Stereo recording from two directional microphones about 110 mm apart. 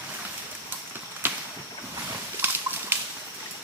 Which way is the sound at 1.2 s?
20° right (ahead or behind).